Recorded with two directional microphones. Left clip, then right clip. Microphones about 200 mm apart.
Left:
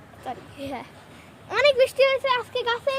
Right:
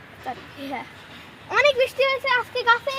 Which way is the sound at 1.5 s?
10° left (ahead or behind).